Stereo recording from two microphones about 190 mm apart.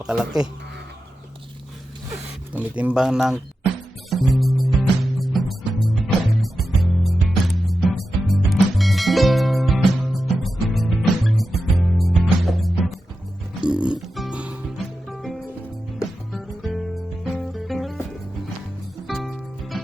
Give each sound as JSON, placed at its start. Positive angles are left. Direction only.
{"t": 0.0, "sound": "speech", "side_deg": -5}
{"t": 2.5, "sound": "speech", "side_deg": -5}
{"t": 4.1, "sound": "music", "side_deg": 0}
{"t": 19.0, "sound": "music", "side_deg": 0}